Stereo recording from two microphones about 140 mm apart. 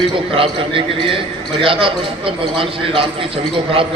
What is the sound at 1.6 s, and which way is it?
A man's voice, 40° right (ahead or behind).